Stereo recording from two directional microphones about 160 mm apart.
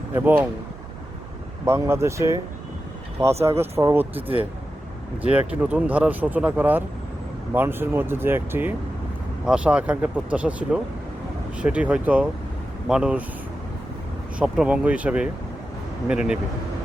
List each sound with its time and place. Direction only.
0.1 s speech: 10° right (ahead or behind)
1.6 s speech: 15° right (ahead or behind)
3.4 s speech: 15° right (ahead or behind)
5.5 s speech: 10° right (ahead or behind)
14.3 s speech: 5° right (ahead or behind)